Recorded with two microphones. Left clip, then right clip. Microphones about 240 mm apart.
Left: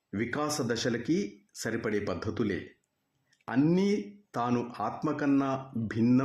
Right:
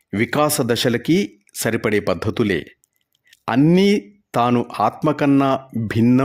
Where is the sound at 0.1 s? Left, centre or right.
Right.